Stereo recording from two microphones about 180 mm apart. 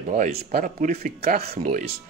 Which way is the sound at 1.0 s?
55° right (ahead or behind).